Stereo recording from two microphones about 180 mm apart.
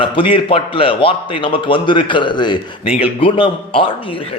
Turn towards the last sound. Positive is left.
turn(degrees=30)  # may be behind; listen again after turning